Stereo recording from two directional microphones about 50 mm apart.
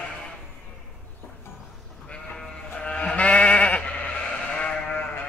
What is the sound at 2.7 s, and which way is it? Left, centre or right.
Sheep, centre.